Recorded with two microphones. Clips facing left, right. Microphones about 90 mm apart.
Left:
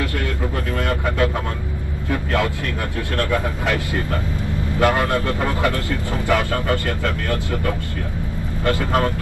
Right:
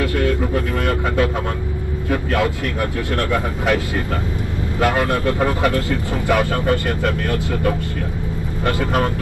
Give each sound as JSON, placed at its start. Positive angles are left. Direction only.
{"t": 0.8, "sound": "vehicle", "side_deg": -20}
{"t": 3.2, "sound": "speech", "side_deg": -20}